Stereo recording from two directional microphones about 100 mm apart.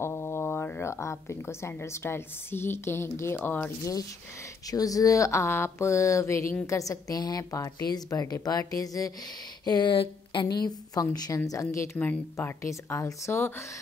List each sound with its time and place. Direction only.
0.0 s speech: 25° left (ahead or behind)
4.6 s a woman's voice: 35° left (ahead or behind)
9.7 s a woman's voice: 45° left (ahead or behind); by 13.7 s 25° left (ahead or behind)